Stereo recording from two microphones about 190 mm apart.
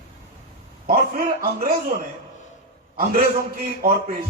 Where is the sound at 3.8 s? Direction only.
50° right (ahead or behind).